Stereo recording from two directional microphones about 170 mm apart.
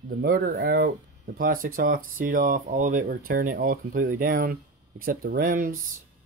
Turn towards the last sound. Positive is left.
turn(degrees=-55)  # may be behind; listen again after turning